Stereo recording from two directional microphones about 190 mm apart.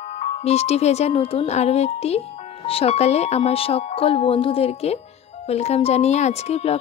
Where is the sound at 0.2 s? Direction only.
35° left (ahead or behind).